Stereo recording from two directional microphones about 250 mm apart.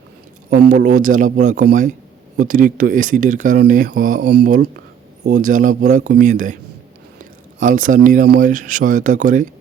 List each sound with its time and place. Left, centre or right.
0.8 s speech: right